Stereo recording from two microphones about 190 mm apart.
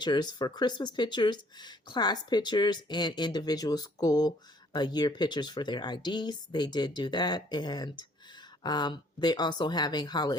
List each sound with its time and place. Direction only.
0.0 s speech: 20° left (ahead or behind)